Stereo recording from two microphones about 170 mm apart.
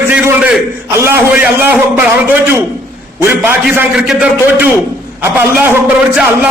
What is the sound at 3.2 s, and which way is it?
A man's voice, 15° right (ahead or behind).